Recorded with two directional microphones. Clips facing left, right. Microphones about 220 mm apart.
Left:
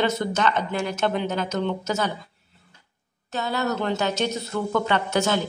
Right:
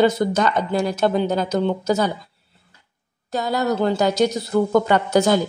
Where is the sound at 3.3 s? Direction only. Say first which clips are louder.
Right 5 dB; 40° right (ahead or behind).